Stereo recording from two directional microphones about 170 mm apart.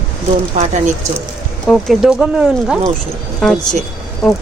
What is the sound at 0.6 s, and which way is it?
Speech, 45° right (ahead or behind).